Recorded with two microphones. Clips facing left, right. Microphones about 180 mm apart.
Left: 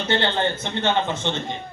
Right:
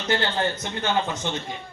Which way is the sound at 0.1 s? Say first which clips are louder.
Left 1 dB; 25° left (ahead or behind).